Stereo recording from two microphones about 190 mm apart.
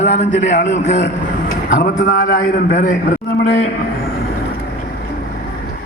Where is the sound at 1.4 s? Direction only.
45° left (ahead or behind).